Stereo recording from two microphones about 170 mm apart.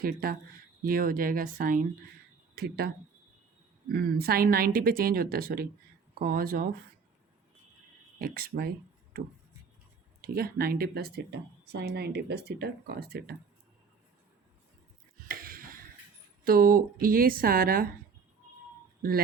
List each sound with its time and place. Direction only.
0.0 s a woman's voice: 60° right (ahead or behind)
2.6 s speech: 70° right (ahead or behind)
3.9 s a woman's voice: 60° right (ahead or behind)
8.2 s a woman's voice: 60° right (ahead or behind)
10.2 s speech: 60° right (ahead or behind)
15.3 s a sound: 60° right (ahead or behind)
16.4 s a woman's voice: 60° right (ahead or behind)